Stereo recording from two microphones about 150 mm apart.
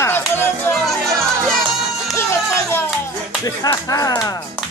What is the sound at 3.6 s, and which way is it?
Speech, 25° left (ahead or behind).